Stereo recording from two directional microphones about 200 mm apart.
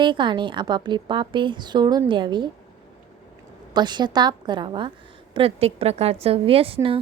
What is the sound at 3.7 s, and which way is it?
A woman's voice, 20° right (ahead or behind).